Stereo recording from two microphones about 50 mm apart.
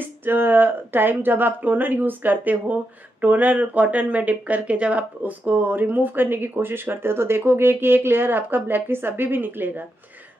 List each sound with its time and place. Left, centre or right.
0.0 s speech: right